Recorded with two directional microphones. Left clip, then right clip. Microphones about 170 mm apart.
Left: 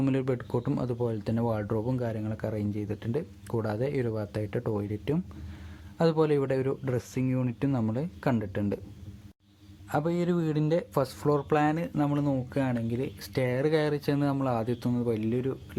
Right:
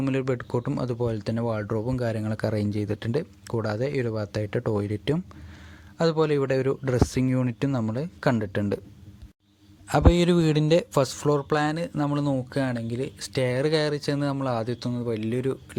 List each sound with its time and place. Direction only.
0.0 s speech: 15° right (ahead or behind)
3.4 s speech: 15° right (ahead or behind)
9.9 s speech: 25° right (ahead or behind)